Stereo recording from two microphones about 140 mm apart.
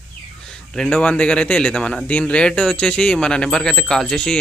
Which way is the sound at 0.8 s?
10° left (ahead or behind).